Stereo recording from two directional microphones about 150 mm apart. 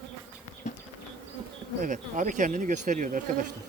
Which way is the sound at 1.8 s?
60° right (ahead or behind).